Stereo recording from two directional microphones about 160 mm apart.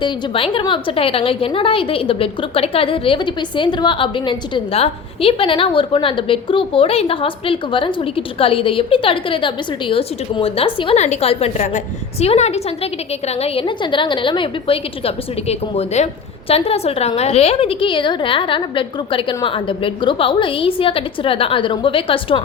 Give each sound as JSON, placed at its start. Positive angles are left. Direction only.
{"t": 0.0, "sound": "a woman's voice", "side_deg": 35}